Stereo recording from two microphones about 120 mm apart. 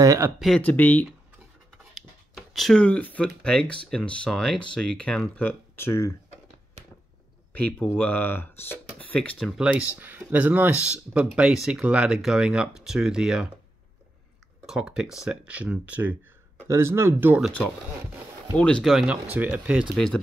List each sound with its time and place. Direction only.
0.0 s speech: 25° right (ahead or behind)
0.6 s speech: 15° left (ahead or behind)
2.0 s speech: centre (ahead or behind); by 6.1 s 20° left (ahead or behind)
7.5 s speech: 15° left (ahead or behind)
9.9 s speech: 15° right (ahead or behind)
14.7 s speech: 5° right (ahead or behind)
16.6 s speech: 20° right (ahead or behind)
18.6 s speech: 5° left (ahead or behind)
19.3 s speech: 15° right (ahead or behind)